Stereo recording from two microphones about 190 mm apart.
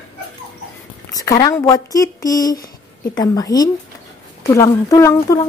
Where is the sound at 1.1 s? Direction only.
20° left (ahead or behind).